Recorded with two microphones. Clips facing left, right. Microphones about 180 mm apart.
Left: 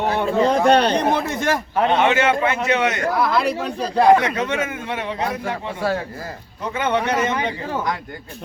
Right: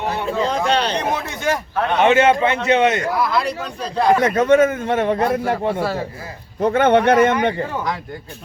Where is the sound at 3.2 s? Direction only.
Centre (ahead or behind).